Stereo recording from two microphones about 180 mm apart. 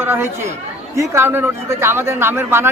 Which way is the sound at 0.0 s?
15° right (ahead or behind).